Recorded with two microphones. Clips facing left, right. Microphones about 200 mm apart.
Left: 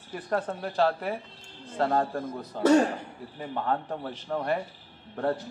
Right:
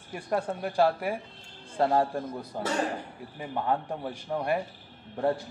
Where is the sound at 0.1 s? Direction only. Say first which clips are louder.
Even; 10° right (ahead or behind).